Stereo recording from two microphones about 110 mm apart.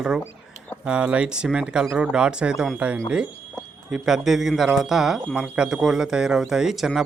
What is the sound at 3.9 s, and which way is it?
Speech, 5° right (ahead or behind).